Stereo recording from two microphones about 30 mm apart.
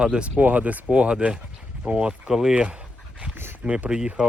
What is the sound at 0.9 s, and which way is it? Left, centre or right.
Speech, right.